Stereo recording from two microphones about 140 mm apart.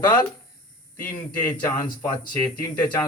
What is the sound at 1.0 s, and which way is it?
Speech, 10° left (ahead or behind).